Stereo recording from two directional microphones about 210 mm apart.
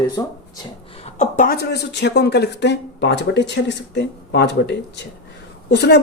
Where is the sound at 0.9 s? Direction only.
30° left (ahead or behind).